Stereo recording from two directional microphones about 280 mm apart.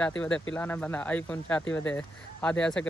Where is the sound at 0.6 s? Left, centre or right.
Centre.